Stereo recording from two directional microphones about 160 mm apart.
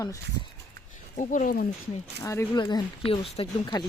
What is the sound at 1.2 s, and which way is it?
Speech, 55° left (ahead or behind).